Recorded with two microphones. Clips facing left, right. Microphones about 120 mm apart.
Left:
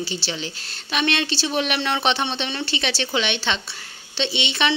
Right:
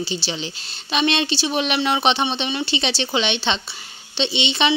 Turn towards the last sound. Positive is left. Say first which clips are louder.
# right 2 dB
turn(degrees=-20)  # may be behind; listen again after turning